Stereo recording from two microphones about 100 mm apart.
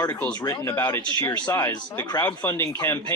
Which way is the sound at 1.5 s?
30° left (ahead or behind).